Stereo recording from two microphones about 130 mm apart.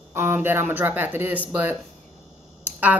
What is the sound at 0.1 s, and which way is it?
A woman's voice, 20° right (ahead or behind).